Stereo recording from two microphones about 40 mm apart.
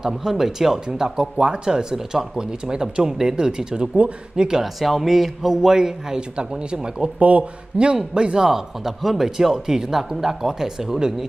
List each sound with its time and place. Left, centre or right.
0.0 s speech: centre
4.7 s speech: centre; by 7.1 s right
7.2 s speech: right
8.1 s speech: right
8.5 s speech: centre